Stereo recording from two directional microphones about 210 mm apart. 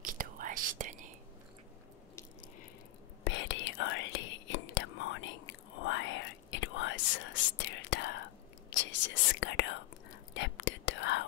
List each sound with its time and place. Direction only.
0.0 s whispering: 40° right (ahead or behind)
3.3 s whispering: 60° left (ahead or behind)